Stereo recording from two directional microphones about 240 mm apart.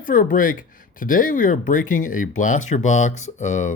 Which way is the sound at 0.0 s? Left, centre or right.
Left.